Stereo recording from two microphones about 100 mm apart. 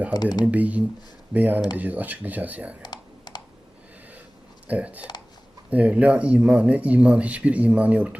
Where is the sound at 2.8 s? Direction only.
45° left (ahead or behind).